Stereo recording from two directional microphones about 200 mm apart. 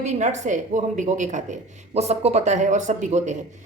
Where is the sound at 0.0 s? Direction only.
35° right (ahead or behind).